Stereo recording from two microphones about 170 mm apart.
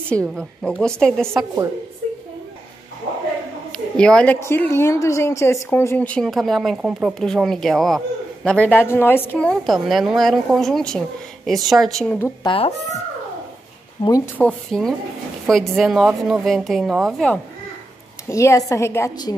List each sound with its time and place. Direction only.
0.1 s a woman's voice: 5° left (ahead or behind)
3.7 s a woman's voice: 5° left (ahead or behind)
12.4 s speech: 35° left (ahead or behind)
14.0 s speech: 20° left (ahead or behind)
14.4 s a woman's voice: 5° left (ahead or behind)
18.3 s a woman's voice: 15° left (ahead or behind)